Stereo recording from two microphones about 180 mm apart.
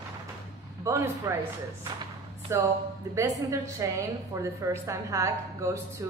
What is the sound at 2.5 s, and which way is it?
A woman's voice, 15° right (ahead or behind).